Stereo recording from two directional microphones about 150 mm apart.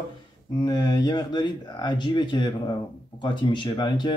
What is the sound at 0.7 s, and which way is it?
Speech, 25° left (ahead or behind).